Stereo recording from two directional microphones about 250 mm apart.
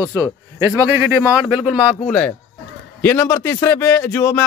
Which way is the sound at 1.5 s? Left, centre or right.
Centre.